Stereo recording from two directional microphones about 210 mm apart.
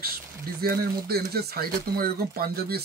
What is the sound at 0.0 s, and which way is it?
Speech, 45° right (ahead or behind).